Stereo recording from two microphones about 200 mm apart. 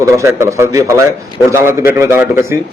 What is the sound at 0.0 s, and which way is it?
A man's voice, 15° right (ahead or behind).